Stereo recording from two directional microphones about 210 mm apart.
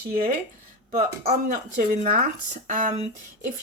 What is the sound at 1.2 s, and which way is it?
Speech, 35° right (ahead or behind).